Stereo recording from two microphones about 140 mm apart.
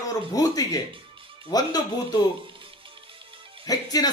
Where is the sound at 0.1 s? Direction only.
25° left (ahead or behind).